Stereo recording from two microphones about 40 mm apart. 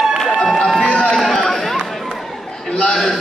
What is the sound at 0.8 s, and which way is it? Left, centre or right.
Run, left.